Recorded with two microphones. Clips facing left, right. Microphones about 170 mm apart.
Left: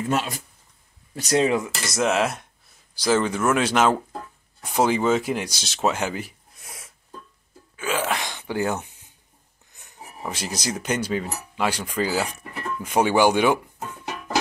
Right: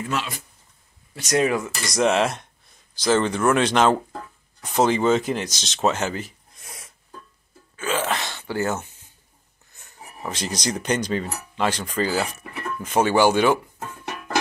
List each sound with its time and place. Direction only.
0.1 s speech: 45° left (ahead or behind)
1.1 s speech: 30° left (ahead or behind)
1.9 s cutlery: 5° left (ahead or behind)
2.9 s speech: 10° left (ahead or behind)
7.7 s a sound: 10° left (ahead or behind)
10.2 s speech: 5° left (ahead or behind)